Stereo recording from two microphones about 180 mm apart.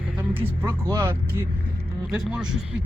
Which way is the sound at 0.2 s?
10° right (ahead or behind).